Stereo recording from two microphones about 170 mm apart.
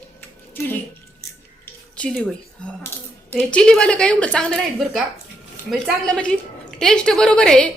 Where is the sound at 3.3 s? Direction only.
5° left (ahead or behind).